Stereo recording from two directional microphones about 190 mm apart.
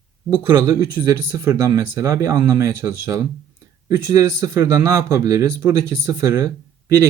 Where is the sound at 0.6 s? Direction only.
15° right (ahead or behind).